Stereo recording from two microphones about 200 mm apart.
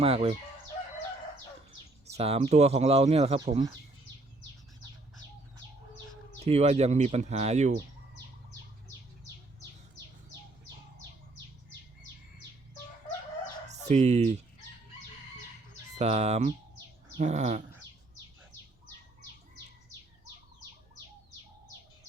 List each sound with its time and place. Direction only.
0.0 s speech: 30° right (ahead or behind)
2.1 s speech: 30° right (ahead or behind)
6.4 s speech: 30° right (ahead or behind)
13.7 s fowl: 35° right (ahead or behind)
16.0 s speech: 35° right (ahead or behind)